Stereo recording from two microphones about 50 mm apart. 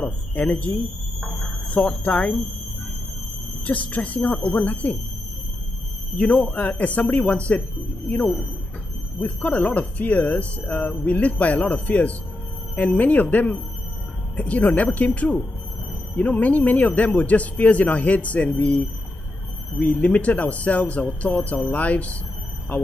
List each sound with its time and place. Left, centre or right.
0.3 s speech: left
1.7 s speech: left
3.6 s speech: left
6.5 s speech: left
9.2 s speech: left